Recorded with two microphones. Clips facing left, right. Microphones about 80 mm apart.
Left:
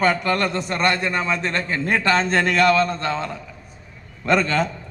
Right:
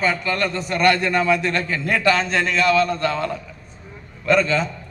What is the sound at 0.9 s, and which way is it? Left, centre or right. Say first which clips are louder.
A man's voice: right 4 dB; left.